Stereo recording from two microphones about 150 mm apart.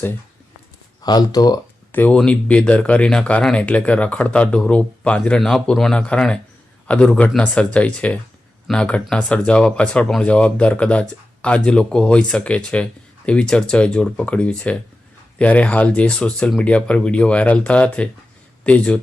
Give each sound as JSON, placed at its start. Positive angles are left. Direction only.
{"t": 1.0, "sound": "speech", "side_deg": 25}
{"t": 1.9, "sound": "speech", "side_deg": 10}